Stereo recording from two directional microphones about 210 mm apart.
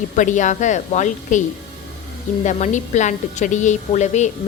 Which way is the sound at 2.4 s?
35° left (ahead or behind).